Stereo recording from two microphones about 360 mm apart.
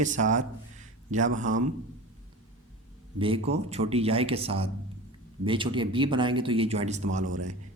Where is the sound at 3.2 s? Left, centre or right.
Centre.